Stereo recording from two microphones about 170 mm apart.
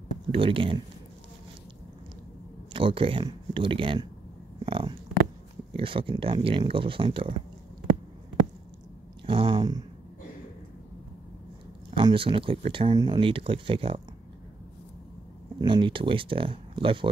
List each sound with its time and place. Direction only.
0.3 s speech: 30° right (ahead or behind)
2.7 s speech: 30° right (ahead or behind)
4.6 s a sound: 30° right (ahead or behind)
5.7 s speech: 30° right (ahead or behind)
9.2 s speech: 30° right (ahead or behind)
11.9 s speech: 30° right (ahead or behind)
15.6 s speech: 30° right (ahead or behind)